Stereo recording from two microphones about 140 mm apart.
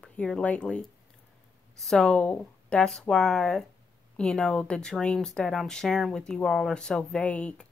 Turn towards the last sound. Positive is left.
turn(degrees=10)  # may be behind; listen again after turning